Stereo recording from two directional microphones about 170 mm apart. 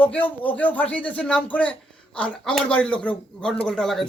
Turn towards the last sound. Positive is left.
turn(degrees=0)  # may be behind; listen again after turning